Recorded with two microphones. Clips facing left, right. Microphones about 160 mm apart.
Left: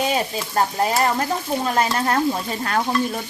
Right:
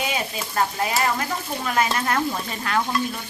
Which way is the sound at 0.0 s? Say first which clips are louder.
Left 5 dB; 35° left (ahead or behind).